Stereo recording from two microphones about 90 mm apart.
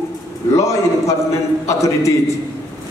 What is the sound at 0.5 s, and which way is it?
A man's voice, 35° left (ahead or behind).